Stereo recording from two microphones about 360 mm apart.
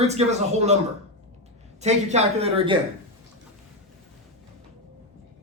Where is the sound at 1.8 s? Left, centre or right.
Centre.